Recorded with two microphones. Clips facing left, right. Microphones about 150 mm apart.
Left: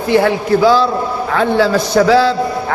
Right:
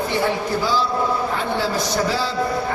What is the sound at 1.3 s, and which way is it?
Speech, 90° left.